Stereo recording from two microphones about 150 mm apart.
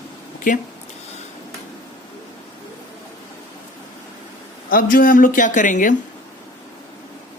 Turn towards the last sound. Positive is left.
turn(degrees=60)  # may be behind; listen again after turning